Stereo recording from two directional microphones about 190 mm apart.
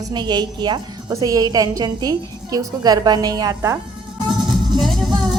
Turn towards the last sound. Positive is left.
turn(degrees=0)  # may be behind; listen again after turning